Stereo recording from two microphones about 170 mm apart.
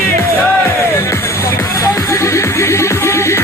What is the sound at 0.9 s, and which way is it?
Music, 15° left (ahead or behind).